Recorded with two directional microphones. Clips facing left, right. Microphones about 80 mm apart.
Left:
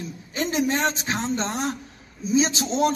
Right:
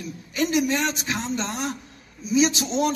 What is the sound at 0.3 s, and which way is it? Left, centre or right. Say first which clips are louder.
A man's voice: right 1 dB; left.